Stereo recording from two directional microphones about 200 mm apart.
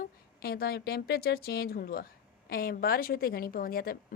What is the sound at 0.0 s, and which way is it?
A woman's voice, 50° left (ahead or behind).